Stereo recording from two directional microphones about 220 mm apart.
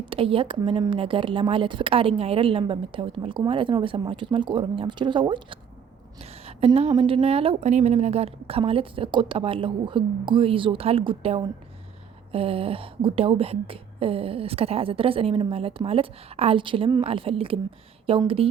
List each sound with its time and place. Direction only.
0.0 s speech: 25° right (ahead or behind)